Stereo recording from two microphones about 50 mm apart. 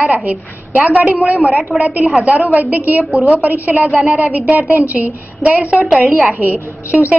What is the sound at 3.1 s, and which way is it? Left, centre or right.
Speech, right.